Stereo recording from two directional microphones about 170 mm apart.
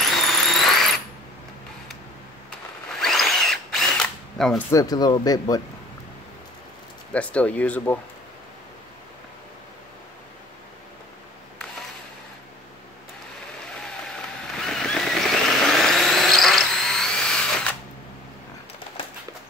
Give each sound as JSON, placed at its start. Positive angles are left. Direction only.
{"t": 0.0, "sound": "ratchet", "side_deg": 0}
{"t": 3.0, "sound": "drill", "side_deg": 0}
{"t": 4.6, "sound": "speech", "side_deg": 20}
{"t": 7.1, "sound": "speech", "side_deg": 5}
{"t": 14.0, "sound": "vehicle", "side_deg": 5}